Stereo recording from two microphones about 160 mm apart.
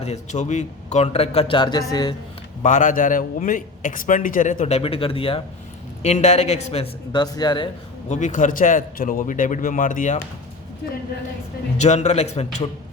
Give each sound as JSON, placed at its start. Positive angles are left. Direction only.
{"t": 0.0, "sound": "a man's voice", "side_deg": 45}
{"t": 2.6, "sound": "a man's voice", "side_deg": 55}
{"t": 6.0, "sound": "a man's voice", "side_deg": 45}
{"t": 7.1, "sound": "speech", "side_deg": 25}
{"t": 8.1, "sound": "a man's voice", "side_deg": 50}
{"t": 11.8, "sound": "a man's voice", "side_deg": 45}